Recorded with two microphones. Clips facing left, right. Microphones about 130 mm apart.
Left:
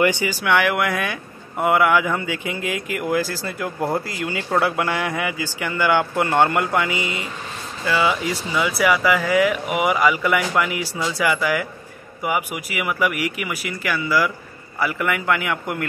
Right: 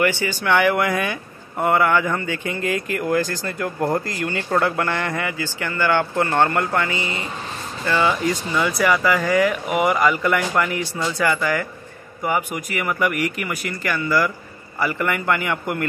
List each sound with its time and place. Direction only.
0.0 s speech: 15° left (ahead or behind)
0.4 s speech: centre (ahead or behind)